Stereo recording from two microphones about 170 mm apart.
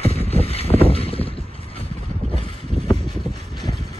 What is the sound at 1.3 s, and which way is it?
Vehicle, 35° left (ahead or behind).